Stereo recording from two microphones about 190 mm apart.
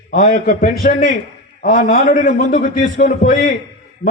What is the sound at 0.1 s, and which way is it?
A man's voice, 45° left (ahead or behind).